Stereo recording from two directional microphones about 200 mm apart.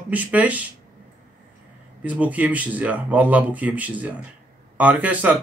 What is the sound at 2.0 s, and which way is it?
Speech, 5° right (ahead or behind).